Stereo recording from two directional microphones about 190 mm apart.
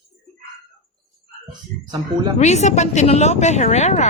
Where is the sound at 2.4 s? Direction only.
35° left (ahead or behind).